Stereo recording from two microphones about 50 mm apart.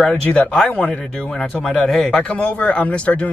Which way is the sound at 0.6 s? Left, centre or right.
Centre.